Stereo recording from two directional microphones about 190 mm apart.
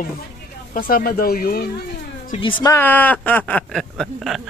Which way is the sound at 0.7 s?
50° left (ahead or behind).